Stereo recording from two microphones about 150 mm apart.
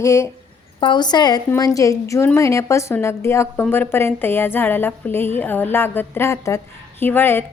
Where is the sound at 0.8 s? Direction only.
30° left (ahead or behind).